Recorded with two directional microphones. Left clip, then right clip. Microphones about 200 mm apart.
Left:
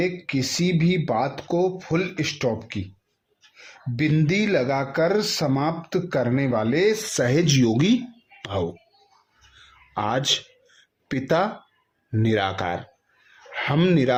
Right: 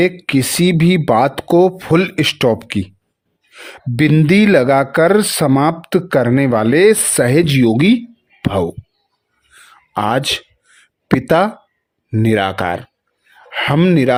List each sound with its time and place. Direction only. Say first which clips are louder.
0.0 s speech: right 10 dB; 55° right (ahead or behind)
9.6 s a sound: right 8 dB; 40° right (ahead or behind)
12.1 s speech: right 8 dB; 40° right (ahead or behind)